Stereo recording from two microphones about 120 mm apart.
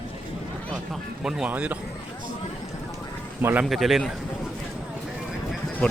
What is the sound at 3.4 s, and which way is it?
Speech, 15° right (ahead or behind).